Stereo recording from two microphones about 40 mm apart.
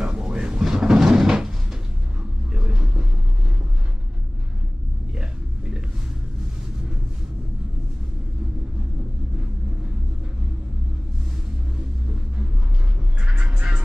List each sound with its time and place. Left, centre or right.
0.0 s cupboard open or close: centre
2.5 s rumble: right
5.1 s a sound: centre
13.4 s music: right